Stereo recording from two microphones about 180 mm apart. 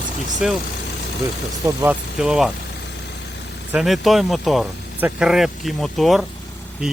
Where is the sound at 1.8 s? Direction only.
Centre (ahead or behind).